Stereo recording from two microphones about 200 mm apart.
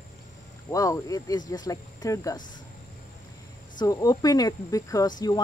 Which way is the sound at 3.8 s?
20° left (ahead or behind).